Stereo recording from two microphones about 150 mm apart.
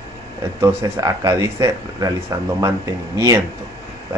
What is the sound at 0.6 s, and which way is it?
Speech, 20° right (ahead or behind).